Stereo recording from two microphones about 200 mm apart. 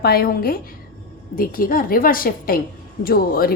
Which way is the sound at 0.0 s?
50° left (ahead or behind).